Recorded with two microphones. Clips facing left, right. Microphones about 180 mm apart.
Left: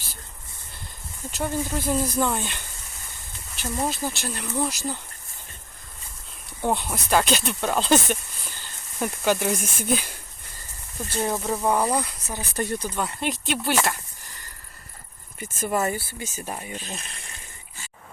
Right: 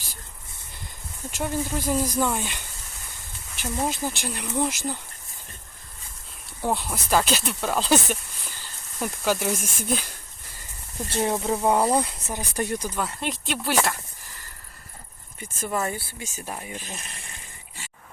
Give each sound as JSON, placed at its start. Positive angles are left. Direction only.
{"t": 1.3, "sound": "speech", "side_deg": -10}
{"t": 6.6, "sound": "speech", "side_deg": 0}
{"t": 11.1, "sound": "speech", "side_deg": -20}
{"t": 11.8, "sound": "speech", "side_deg": -25}
{"t": 12.4, "sound": "speech", "side_deg": -10}
{"t": 12.9, "sound": "speech", "side_deg": 0}
{"t": 15.4, "sound": "speech", "side_deg": 5}